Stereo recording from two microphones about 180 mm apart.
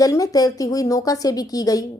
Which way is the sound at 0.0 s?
20° left (ahead or behind).